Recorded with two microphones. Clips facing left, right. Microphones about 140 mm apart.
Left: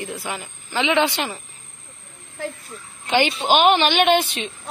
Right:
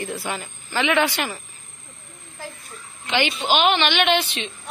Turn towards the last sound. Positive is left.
turn(degrees=45)  # may be behind; listen again after turning